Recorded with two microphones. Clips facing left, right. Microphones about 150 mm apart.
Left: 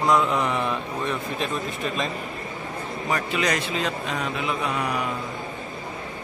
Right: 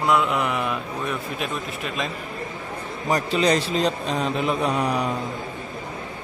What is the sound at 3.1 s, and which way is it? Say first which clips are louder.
A man's voice: right 5 dB; 35° right (ahead or behind).